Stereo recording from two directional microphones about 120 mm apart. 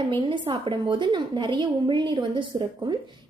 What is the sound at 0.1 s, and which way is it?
A woman's voice, 45° right (ahead or behind).